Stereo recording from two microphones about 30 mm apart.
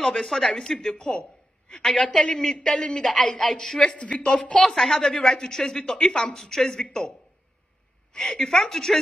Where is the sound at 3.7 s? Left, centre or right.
Left.